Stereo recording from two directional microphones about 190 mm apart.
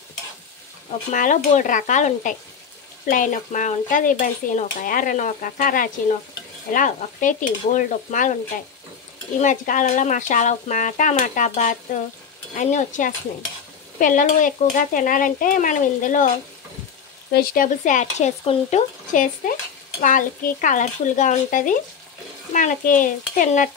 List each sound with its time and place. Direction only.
1.1 s speech: 40° left (ahead or behind)
3.1 s stir: 45° left (ahead or behind)
9.4 s speech: 40° left (ahead or behind)
13.9 s stir: 45° left (ahead or behind)
17.3 s speech: 55° left (ahead or behind)
20.0 s stir: 45° left (ahead or behind)